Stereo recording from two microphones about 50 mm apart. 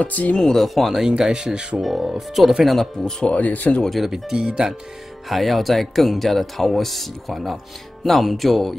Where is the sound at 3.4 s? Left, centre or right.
Left.